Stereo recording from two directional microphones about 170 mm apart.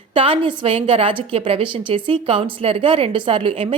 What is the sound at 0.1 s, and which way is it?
A woman's voice, 30° right (ahead or behind).